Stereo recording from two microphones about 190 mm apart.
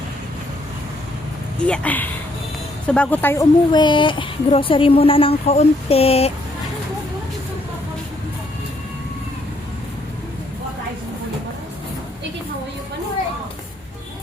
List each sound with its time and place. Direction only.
1.6 s speech: 5° left (ahead or behind)
3.7 s speech: 25° left (ahead or behind)